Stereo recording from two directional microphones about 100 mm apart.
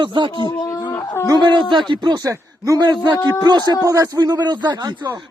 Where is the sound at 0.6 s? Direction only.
40° left (ahead or behind).